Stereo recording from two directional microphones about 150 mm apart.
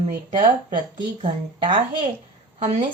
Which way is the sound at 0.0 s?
40° right (ahead or behind).